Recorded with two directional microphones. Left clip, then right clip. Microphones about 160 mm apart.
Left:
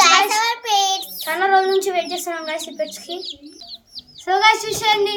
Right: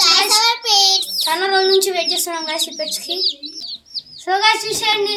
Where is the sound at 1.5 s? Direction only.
10° left (ahead or behind).